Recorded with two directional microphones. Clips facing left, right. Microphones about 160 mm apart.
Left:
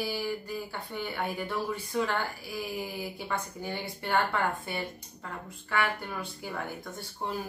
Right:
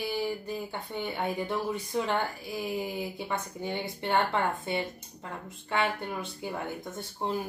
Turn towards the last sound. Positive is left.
turn(degrees=-20)  # may be behind; listen again after turning